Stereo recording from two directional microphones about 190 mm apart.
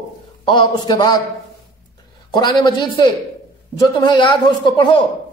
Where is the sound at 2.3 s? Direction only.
20° left (ahead or behind).